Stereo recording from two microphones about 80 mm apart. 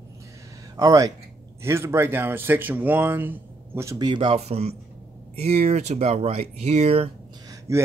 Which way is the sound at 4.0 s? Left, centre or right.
Right.